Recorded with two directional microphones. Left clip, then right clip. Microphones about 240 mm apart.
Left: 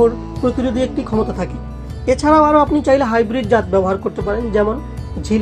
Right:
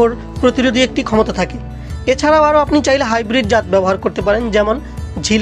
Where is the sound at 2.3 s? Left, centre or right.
Right.